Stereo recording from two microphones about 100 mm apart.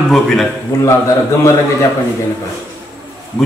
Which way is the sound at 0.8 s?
30° left (ahead or behind).